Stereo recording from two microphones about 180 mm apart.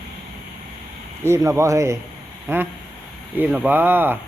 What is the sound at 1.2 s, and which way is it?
Speech, 15° right (ahead or behind).